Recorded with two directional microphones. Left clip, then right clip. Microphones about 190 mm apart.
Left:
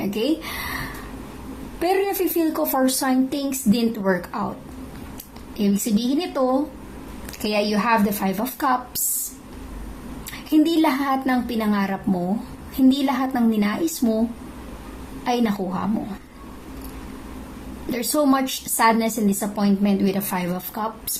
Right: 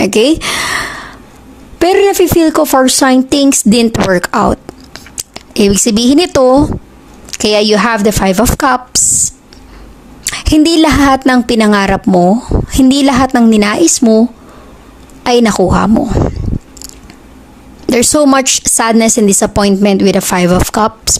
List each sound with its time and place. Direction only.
0.0 s speech: 55° right (ahead or behind)
1.8 s a woman's voice: 60° right (ahead or behind)
10.2 s a woman's voice: 55° right (ahead or behind)
17.9 s a woman's voice: 55° right (ahead or behind)